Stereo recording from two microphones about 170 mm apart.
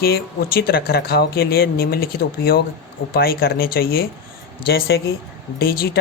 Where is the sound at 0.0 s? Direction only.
65° left (ahead or behind).